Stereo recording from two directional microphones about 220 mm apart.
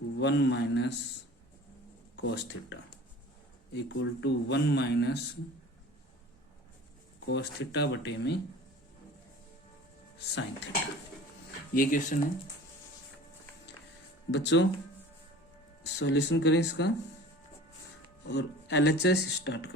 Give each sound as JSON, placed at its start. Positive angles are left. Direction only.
{"t": 0.2, "sound": "speech", "side_deg": 50}
{"t": 2.2, "sound": "speech", "side_deg": 50}
{"t": 7.3, "sound": "speech", "side_deg": 50}
{"t": 10.2, "sound": "speech", "side_deg": 55}
{"t": 11.7, "sound": "speech", "side_deg": 40}
{"t": 14.3, "sound": "speech", "side_deg": 55}
{"t": 15.8, "sound": "speech", "side_deg": 55}
{"t": 18.3, "sound": "speech", "side_deg": 50}